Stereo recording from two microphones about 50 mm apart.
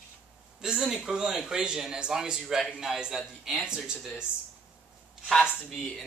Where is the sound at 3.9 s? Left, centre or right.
Centre.